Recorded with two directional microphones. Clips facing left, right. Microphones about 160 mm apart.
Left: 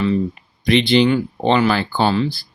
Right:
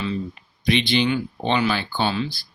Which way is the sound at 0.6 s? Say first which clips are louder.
Left 6 dB; 65° left (ahead or behind).